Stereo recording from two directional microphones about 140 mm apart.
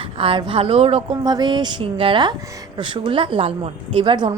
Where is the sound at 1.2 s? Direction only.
30° right (ahead or behind).